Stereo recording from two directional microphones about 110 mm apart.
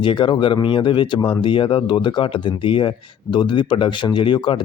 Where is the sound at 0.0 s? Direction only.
50° left (ahead or behind).